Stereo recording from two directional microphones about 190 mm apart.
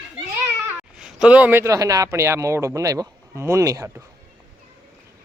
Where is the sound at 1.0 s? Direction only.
5° right (ahead or behind).